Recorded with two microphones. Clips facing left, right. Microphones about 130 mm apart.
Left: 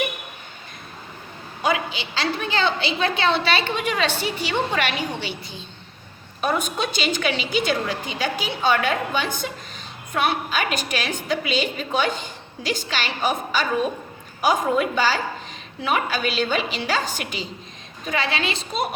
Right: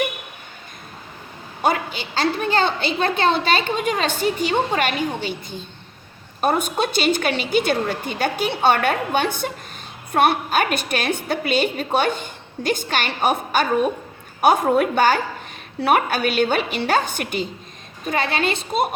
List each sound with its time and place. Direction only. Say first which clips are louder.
1.6 s a woman's voice: right 2 dB; 45° right (ahead or behind)